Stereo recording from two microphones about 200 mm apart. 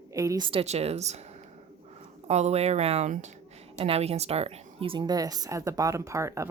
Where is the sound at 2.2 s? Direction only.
35° right (ahead or behind); by 6.4 s 15° right (ahead or behind).